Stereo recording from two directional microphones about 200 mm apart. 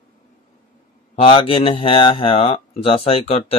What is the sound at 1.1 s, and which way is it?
Speech, 25° left (ahead or behind).